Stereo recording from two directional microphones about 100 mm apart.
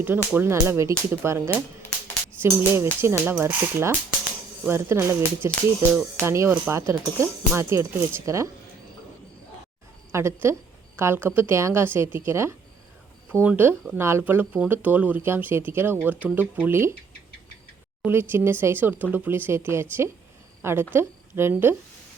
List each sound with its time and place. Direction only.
0.0 s speech: 20° right (ahead or behind)
2.4 s speech: 25° right (ahead or behind)
10.1 s speech: 25° right (ahead or behind)
18.0 s a woman's voice: 20° right (ahead or behind)